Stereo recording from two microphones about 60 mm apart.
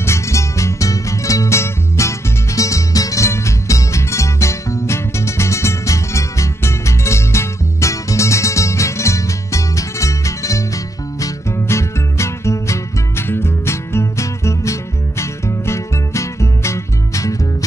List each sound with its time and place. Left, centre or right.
0.0 s music: left
3.3 s music: left
11.5 s music: left